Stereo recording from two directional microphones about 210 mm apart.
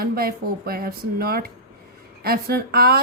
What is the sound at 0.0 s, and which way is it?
A woman's voice, 45° right (ahead or behind).